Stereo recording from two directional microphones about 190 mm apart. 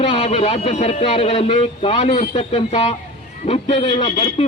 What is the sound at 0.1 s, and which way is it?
A man's voice, 35° left (ahead or behind).